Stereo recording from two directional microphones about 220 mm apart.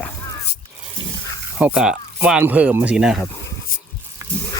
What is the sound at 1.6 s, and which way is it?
Speech, 5° right (ahead or behind).